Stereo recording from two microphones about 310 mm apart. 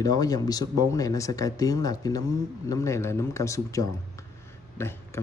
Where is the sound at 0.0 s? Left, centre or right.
Centre.